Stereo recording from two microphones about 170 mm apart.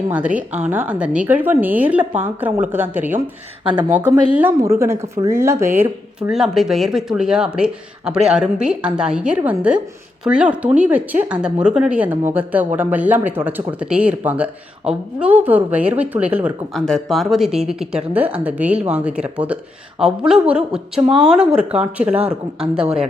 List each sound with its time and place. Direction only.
0.1 s speech: 10° right (ahead or behind)
3.6 s speech: 30° right (ahead or behind)
3.9 s speech: 10° right (ahead or behind)
16.7 s speech: 5° left (ahead or behind)